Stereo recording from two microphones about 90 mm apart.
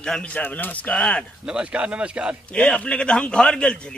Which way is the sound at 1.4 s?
10° right (ahead or behind).